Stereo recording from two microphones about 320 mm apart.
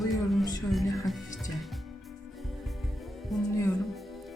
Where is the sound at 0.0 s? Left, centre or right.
Centre.